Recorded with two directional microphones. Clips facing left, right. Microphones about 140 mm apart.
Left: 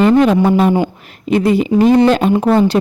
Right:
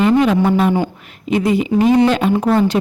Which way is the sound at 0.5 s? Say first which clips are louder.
Left 3 dB; 40° left (ahead or behind).